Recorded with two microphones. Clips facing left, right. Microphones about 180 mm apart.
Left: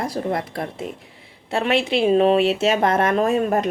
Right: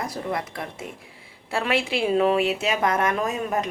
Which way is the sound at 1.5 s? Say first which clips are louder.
Left 4 dB; 20° left (ahead or behind).